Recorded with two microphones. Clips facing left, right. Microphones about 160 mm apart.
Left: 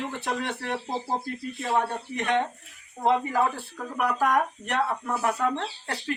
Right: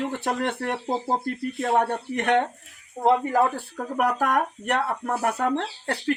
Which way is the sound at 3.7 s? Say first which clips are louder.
Right 3 dB; 50° right (ahead or behind).